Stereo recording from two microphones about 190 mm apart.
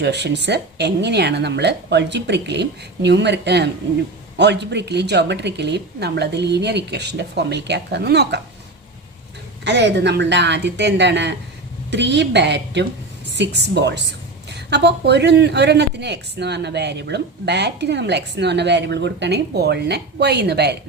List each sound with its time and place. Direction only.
0.0 s a woman's voice: 65° right (ahead or behind)
9.6 s a woman's voice: 65° right (ahead or behind)